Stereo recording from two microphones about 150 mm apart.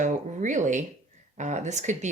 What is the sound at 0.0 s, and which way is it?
Speech, 55° right (ahead or behind).